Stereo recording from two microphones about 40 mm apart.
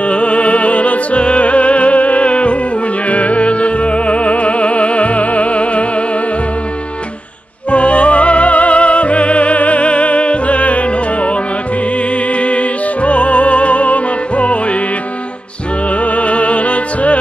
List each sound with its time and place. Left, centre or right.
0.0 s music: left
7.7 s music: left
15.9 s music: left